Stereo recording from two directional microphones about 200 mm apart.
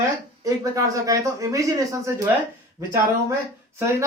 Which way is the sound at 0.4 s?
15° right (ahead or behind).